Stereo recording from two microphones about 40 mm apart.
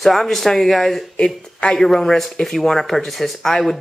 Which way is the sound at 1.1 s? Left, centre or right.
Left.